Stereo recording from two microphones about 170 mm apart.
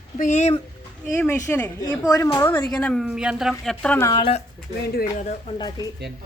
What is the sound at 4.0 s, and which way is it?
Speech, 20° left (ahead or behind).